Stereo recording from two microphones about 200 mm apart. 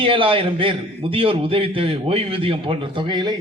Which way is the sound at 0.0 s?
25° right (ahead or behind).